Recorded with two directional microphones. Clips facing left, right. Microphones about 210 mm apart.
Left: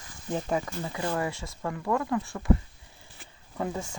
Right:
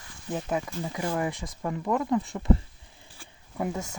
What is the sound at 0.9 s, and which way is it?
Speech, 15° right (ahead or behind).